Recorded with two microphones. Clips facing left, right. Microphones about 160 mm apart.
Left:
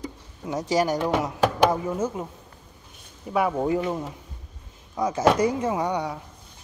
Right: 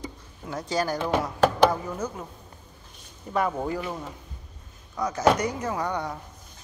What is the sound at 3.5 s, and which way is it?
Speech, 20° left (ahead or behind).